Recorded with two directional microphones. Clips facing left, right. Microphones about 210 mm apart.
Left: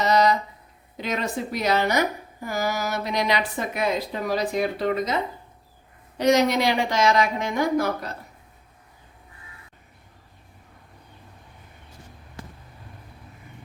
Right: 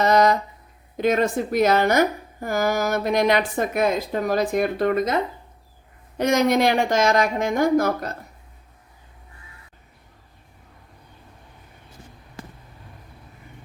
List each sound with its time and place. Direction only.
0.0 s a sound: 50° right (ahead or behind)
0.9 s a woman's voice: 50° right (ahead or behind)
6.1 s a woman's voice: 50° right (ahead or behind)